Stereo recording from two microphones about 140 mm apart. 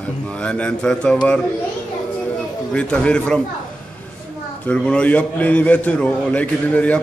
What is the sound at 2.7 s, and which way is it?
Speech, 5° left (ahead or behind).